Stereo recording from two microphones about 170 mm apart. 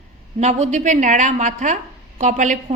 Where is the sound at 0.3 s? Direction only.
40° right (ahead or behind).